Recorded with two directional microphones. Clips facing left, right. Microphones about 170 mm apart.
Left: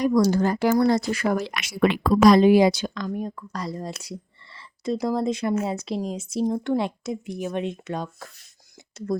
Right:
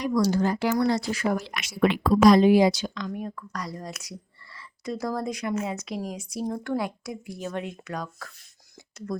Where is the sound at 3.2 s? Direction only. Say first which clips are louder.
Left 3 dB; 30° left (ahead or behind).